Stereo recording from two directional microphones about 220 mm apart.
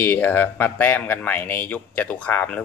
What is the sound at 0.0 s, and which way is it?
Speech, 10° left (ahead or behind).